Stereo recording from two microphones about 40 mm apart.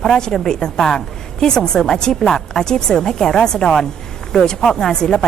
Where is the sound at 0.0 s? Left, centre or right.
Centre.